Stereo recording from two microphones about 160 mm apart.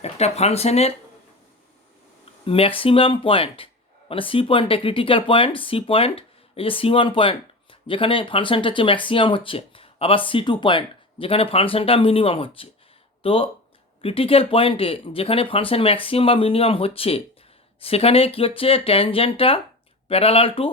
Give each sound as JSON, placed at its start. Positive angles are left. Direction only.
{"t": 0.0, "sound": "speech", "side_deg": 40}
{"t": 2.4, "sound": "speech", "side_deg": 35}